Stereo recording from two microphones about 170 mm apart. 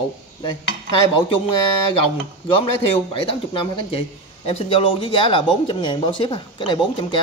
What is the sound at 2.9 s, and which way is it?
Speech, 30° left (ahead or behind).